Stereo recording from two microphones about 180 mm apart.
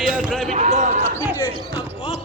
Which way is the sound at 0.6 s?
40° right (ahead or behind).